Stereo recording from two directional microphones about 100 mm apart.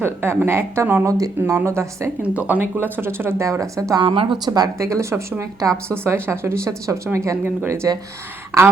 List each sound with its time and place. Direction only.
0.0 s speech: 20° right (ahead or behind)
1.0 s speech: 35° right (ahead or behind)
2.2 s speech: 15° right (ahead or behind); by 4.0 s 35° right (ahead or behind)
4.0 s a woman's voice: 60° right (ahead or behind)
4.4 s speech: 40° right (ahead or behind)